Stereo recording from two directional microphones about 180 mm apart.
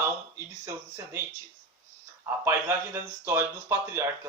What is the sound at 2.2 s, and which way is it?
Speech, 15° right (ahead or behind).